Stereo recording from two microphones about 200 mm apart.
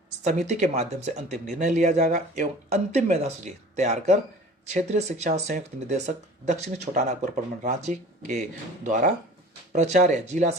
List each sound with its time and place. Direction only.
0.3 s speech: 35° right (ahead or behind)